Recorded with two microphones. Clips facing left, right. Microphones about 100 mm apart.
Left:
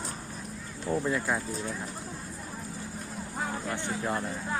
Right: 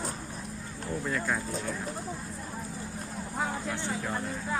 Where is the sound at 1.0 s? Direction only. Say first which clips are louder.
Right 1 dB; 10° left (ahead or behind).